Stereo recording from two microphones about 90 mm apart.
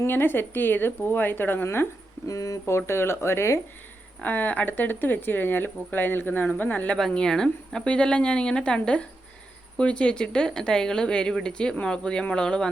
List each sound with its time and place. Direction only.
0.0 s a woman's voice: 25° left (ahead or behind)
2.2 s a woman's voice: 40° left (ahead or behind)
4.2 s speech: 20° left (ahead or behind)